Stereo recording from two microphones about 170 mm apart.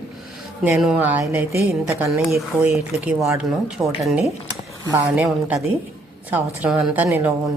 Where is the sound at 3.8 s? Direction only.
Centre (ahead or behind).